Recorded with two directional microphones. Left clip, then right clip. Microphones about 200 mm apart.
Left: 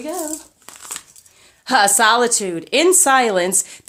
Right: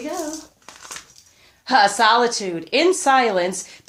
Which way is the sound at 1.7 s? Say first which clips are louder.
Left 1 dB; 35° left (ahead or behind).